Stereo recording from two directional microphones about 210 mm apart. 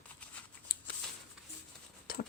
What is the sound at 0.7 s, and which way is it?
Shuffling cards, 45° left (ahead or behind).